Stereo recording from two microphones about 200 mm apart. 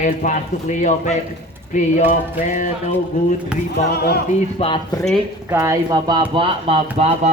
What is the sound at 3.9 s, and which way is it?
Speech, 50° left (ahead or behind).